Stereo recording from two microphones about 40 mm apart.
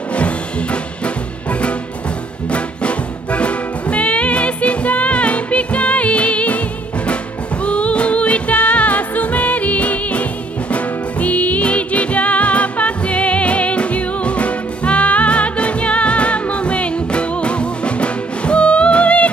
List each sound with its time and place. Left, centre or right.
0.1 s music: left
7.6 s music: left